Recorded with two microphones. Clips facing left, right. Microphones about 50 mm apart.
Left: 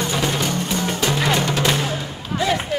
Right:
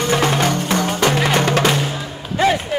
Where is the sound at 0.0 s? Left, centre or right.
Right.